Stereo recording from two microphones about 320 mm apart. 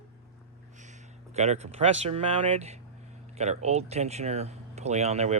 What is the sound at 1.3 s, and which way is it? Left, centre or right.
Speech, centre.